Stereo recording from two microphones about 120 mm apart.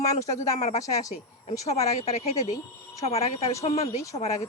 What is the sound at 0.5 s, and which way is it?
Speech, 70° left (ahead or behind).